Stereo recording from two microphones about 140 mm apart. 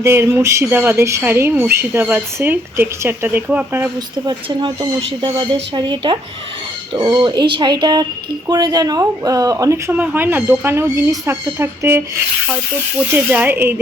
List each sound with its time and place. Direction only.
0.0 s speech: 15° right (ahead or behind)
4.3 s a woman's voice: 30° right (ahead or behind); by 13.7 s 15° right (ahead or behind)